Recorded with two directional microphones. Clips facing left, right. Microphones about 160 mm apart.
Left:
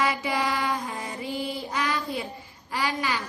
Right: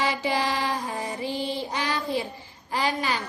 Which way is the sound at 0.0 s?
30° right (ahead or behind).